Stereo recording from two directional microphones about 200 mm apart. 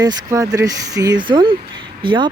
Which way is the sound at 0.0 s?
20° right (ahead or behind).